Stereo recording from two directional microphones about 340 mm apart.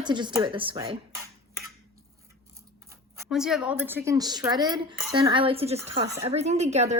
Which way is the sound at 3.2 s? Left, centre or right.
Centre.